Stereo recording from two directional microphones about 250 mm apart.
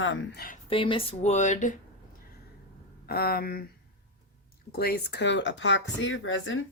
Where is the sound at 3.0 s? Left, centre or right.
Left.